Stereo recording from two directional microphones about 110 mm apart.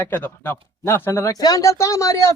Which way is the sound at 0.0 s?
20° left (ahead or behind).